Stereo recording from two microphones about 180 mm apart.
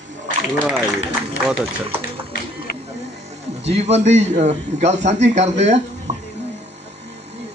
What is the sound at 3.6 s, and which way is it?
A man's voice, 35° right (ahead or behind).